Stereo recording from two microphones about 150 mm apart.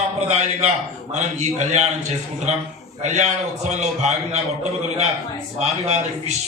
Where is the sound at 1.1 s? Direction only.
50° right (ahead or behind).